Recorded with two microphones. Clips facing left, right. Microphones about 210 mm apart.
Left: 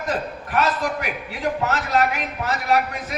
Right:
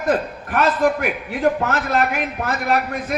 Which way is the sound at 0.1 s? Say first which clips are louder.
Right 5 dB; 50° right (ahead or behind).